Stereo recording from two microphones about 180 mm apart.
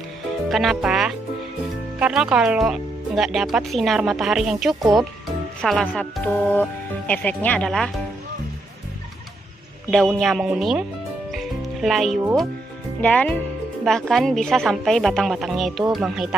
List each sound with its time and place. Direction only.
0.5 s speech: centre (ahead or behind)
10.1 s speech: centre (ahead or behind)
11.3 s music: centre (ahead or behind)
13.0 s speech: 5° left (ahead or behind)